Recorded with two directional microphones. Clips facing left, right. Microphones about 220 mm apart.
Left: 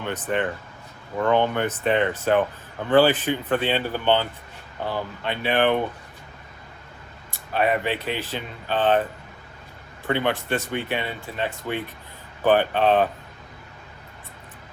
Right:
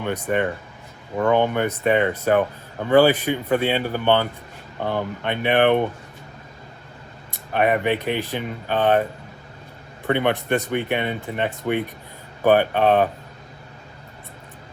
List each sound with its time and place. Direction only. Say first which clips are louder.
0.0 s speech: right 3 dB; 10° right (ahead or behind)
7.5 s speech: right 3 dB; 15° right (ahead or behind)